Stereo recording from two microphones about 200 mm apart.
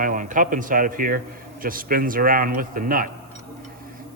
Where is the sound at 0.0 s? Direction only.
40° right (ahead or behind).